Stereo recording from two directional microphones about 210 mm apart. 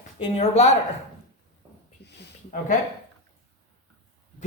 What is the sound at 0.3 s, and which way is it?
Speech, 30° left (ahead or behind).